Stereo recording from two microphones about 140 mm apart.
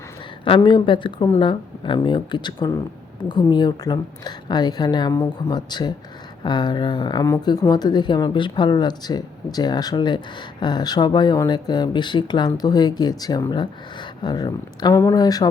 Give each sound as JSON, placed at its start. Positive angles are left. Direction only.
{"t": 0.4, "sound": "speech", "side_deg": 40}